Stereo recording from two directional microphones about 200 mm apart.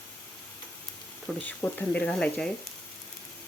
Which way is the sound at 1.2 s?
10° left (ahead or behind).